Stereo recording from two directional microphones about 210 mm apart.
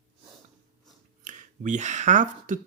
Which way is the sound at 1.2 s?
35° right (ahead or behind).